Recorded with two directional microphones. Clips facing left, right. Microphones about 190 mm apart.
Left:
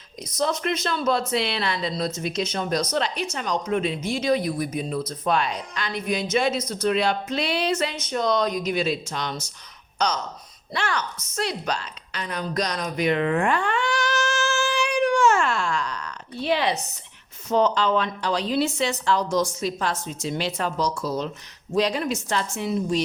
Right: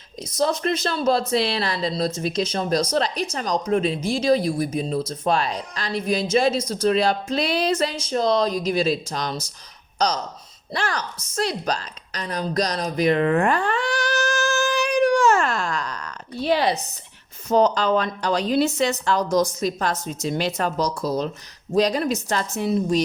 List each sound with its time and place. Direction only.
0.3 s a woman's voice: 35° right (ahead or behind)
10.7 s a sound: 35° right (ahead or behind)
17.5 s a woman's voice: 40° right (ahead or behind)